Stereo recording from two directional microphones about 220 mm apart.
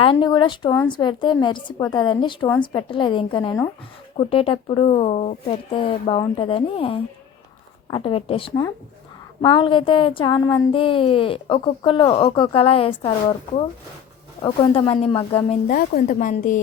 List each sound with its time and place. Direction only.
0.0 s speech: 20° left (ahead or behind)
14.4 s speech: 20° left (ahead or behind)
15.6 s a woman's voice: 40° left (ahead or behind)